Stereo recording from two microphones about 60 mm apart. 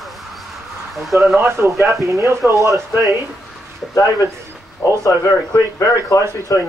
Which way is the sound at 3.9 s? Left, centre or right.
Left.